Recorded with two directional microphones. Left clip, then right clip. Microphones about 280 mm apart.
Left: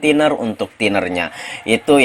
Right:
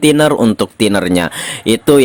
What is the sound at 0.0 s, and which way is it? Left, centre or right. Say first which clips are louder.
Speech: right 4 dB; right.